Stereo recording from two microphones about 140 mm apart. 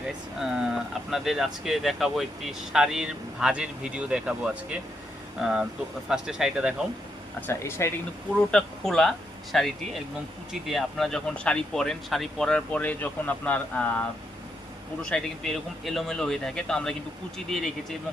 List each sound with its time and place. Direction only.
0.3 s speech: 5° right (ahead or behind)
7.4 s speech: 20° left (ahead or behind)
8.4 s speech: 5° left (ahead or behind)
15.1 s speech: centre (ahead or behind)